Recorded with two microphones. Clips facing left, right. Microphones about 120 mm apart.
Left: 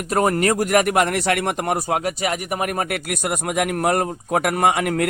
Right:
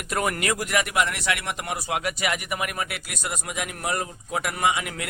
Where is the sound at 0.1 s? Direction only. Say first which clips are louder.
Left 7 dB; 35° left (ahead or behind).